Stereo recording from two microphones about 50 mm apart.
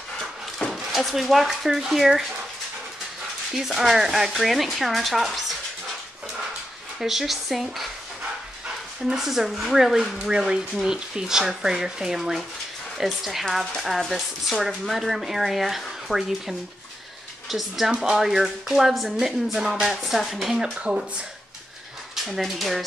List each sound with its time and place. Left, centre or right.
0.7 s speech: centre
3.5 s speech: centre
7.0 s speech: centre
9.0 s speech: centre
20.7 s speech: right
22.1 s speech: centre